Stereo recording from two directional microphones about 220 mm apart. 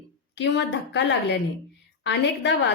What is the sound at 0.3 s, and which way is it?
Speech, 50° left (ahead or behind).